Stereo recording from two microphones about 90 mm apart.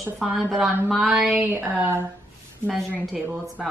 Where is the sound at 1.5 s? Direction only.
20° right (ahead or behind).